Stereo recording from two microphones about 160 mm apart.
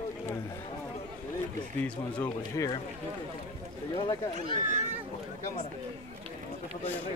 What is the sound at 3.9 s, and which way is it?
Speech, 30° left (ahead or behind).